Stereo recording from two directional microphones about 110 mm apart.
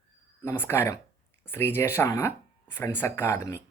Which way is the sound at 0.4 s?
20° left (ahead or behind).